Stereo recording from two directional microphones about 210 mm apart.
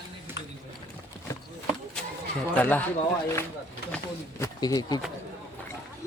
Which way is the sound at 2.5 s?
10° left (ahead or behind).